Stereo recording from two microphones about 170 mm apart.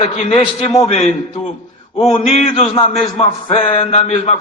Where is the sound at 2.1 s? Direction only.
40° left (ahead or behind).